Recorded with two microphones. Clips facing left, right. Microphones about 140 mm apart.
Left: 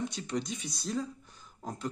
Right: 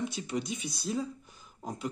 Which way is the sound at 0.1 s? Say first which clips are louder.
Right 1 dB; 5° right (ahead or behind).